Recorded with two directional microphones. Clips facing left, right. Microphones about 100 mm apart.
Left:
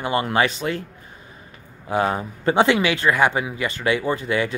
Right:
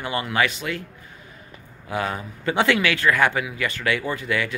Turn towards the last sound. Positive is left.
turn(degrees=30)  # may be behind; listen again after turning